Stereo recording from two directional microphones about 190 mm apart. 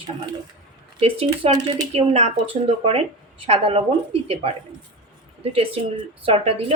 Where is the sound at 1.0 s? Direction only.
30° right (ahead or behind).